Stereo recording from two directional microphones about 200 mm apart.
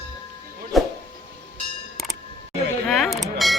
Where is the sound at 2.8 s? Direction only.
Centre (ahead or behind).